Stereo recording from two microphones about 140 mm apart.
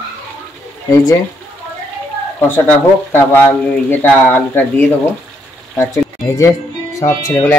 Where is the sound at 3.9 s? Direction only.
15° left (ahead or behind).